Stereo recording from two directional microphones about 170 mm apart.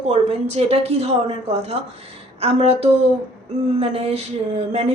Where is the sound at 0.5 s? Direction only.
40° right (ahead or behind).